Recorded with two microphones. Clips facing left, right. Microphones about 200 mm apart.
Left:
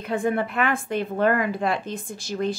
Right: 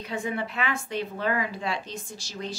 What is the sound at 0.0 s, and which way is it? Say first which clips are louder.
A woman's voice: left 7 dB; 55° left (ahead or behind).